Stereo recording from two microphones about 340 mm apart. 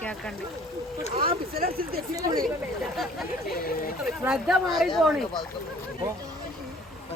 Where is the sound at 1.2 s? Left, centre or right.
Right.